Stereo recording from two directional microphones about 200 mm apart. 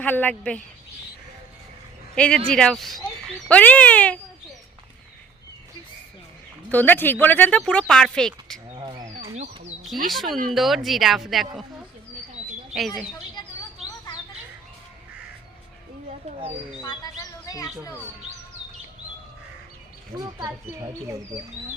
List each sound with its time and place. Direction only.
0.0 s speech: 10° left (ahead or behind)
2.1 s speech: 5° left (ahead or behind)
6.7 s speech: 10° left (ahead or behind)
8.7 s a sound: 25° right (ahead or behind)
9.1 s a sound: 35° right (ahead or behind)
10.1 s speech: centre (ahead or behind)
12.7 s speech: centre (ahead or behind)
13.4 s bird: 20° left (ahead or behind)
16.8 s speech: 20° left (ahead or behind)
20.1 s speech: 20° right (ahead or behind)